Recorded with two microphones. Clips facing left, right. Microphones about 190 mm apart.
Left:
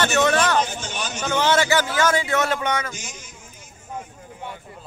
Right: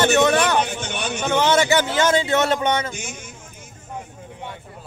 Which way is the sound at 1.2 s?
20° right (ahead or behind).